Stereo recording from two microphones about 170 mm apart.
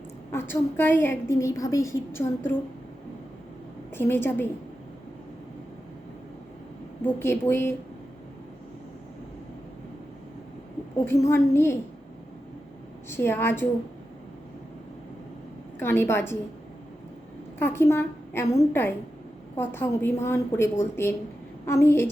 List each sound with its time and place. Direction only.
0.3 s a woman's voice: 15° left (ahead or behind)
3.9 s a woman's voice: 15° left (ahead or behind)
7.0 s a woman's voice: 15° left (ahead or behind)
11.0 s a woman's voice: 15° left (ahead or behind)
13.1 s a woman's voice: 15° left (ahead or behind)
15.8 s a woman's voice: 15° left (ahead or behind)
17.6 s a woman's voice: 15° left (ahead or behind)